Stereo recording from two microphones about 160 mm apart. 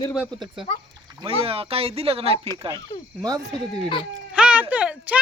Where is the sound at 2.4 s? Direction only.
25° right (ahead or behind).